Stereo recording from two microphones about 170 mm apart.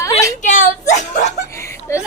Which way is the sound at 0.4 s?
45° left (ahead or behind).